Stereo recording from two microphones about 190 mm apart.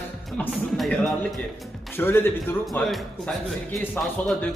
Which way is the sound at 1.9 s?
10° left (ahead or behind).